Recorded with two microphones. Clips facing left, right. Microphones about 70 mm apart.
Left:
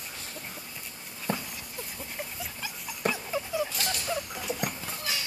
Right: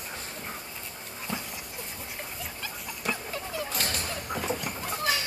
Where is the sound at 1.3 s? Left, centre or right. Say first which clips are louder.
Left 3 dB; left.